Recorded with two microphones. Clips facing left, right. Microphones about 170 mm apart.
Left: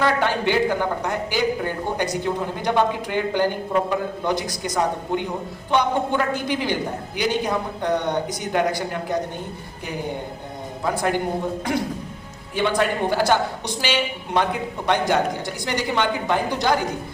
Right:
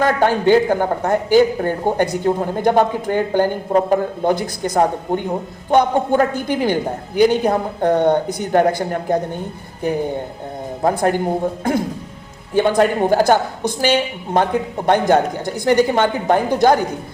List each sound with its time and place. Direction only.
0.0 s a woman's voice: 45° right (ahead or behind)
10.8 s a woman's voice: 45° right (ahead or behind)
12.5 s a woman's voice: 45° right (ahead or behind)